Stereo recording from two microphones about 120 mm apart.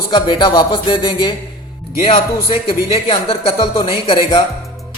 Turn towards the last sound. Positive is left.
turn(degrees=45)  # may be behind; listen again after turning